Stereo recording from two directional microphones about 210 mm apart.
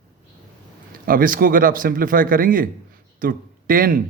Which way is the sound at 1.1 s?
40° right (ahead or behind).